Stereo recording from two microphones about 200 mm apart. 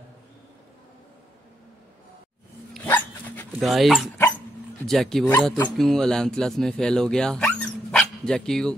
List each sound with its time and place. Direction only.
2.7 s dog: 10° left (ahead or behind)
3.5 s speech: centre (ahead or behind)